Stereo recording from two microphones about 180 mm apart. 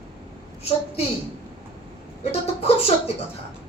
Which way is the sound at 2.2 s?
35° left (ahead or behind).